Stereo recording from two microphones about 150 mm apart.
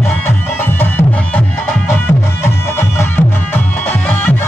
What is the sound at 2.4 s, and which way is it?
Music, 15° left (ahead or behind).